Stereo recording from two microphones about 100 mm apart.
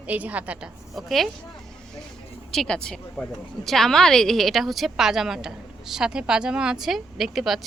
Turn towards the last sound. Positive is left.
turn(degrees=0)  # may be behind; listen again after turning